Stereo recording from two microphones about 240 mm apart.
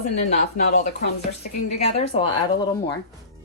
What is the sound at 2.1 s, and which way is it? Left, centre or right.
Speech, left.